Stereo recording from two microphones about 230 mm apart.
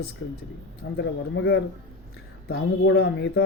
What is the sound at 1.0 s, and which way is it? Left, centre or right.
Speech, left.